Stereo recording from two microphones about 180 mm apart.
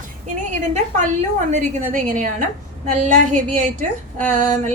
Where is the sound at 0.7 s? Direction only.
40° right (ahead or behind).